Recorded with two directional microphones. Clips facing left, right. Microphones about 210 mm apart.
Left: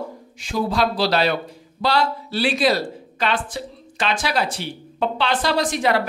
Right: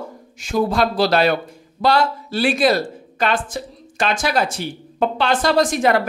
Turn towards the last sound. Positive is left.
turn(degrees=-50)  # may be behind; listen again after turning